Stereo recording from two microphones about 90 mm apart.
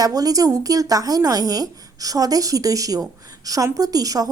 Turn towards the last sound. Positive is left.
turn(degrees=-45)  # may be behind; listen again after turning